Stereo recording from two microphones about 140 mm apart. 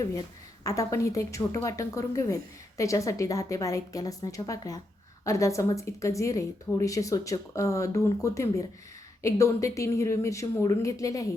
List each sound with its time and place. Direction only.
0.6 s a woman's voice: 25° left (ahead or behind)